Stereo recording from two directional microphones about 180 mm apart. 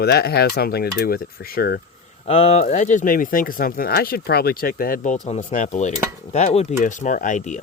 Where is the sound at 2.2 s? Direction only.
35° left (ahead or behind).